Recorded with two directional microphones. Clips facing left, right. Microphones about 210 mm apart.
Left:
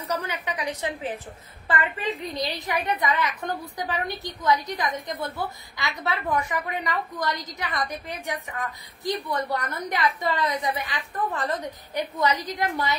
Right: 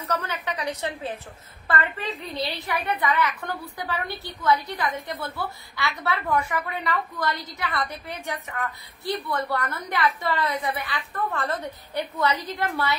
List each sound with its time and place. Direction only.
0.1 s a woman's voice: 15° left (ahead or behind)